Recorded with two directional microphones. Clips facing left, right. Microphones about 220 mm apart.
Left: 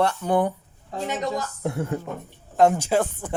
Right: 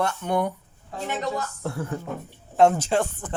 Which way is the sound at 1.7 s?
25° left (ahead or behind).